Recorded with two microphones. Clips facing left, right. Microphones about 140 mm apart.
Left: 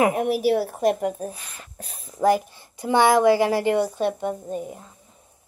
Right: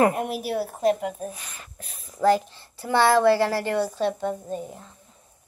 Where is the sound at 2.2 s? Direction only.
10° left (ahead or behind).